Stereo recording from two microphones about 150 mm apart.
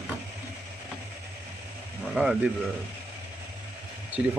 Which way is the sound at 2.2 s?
10° right (ahead or behind).